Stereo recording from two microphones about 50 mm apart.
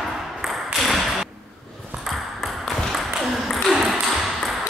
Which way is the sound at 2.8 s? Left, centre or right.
Centre.